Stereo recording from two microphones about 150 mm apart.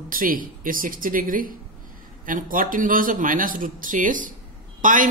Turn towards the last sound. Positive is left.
turn(degrees=-60)  # may be behind; listen again after turning